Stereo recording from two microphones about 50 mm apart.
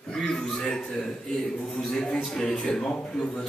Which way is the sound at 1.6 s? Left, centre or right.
Centre.